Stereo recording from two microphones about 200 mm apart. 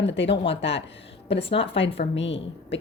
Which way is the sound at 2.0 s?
65° left (ahead or behind).